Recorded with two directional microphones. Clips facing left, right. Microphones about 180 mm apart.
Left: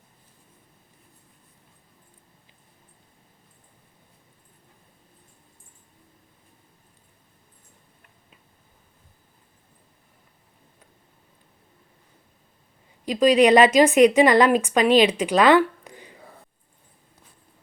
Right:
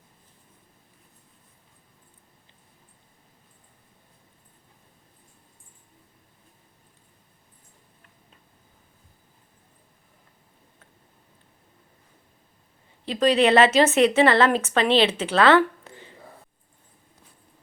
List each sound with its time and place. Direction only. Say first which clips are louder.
13.1 s a woman's voice: left 3 dB; 10° left (ahead or behind)